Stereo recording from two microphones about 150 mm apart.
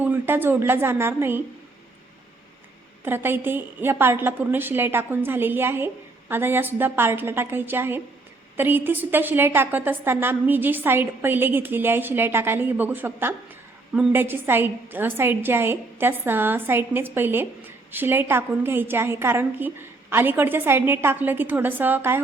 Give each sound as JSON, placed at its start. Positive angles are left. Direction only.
{"t": 0.0, "sound": "a woman's voice", "side_deg": -15}
{"t": 3.0, "sound": "a woman's voice", "side_deg": -15}